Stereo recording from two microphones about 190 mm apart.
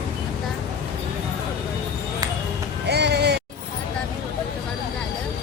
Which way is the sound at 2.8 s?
60° right (ahead or behind).